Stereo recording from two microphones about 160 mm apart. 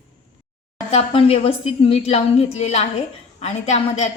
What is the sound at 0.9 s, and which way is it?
A woman's voice, 40° left (ahead or behind).